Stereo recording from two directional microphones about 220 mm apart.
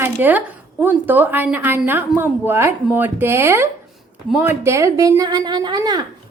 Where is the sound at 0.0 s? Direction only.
10° right (ahead or behind).